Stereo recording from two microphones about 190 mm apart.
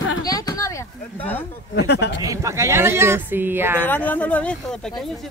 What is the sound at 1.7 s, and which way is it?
Speech, 60° left (ahead or behind).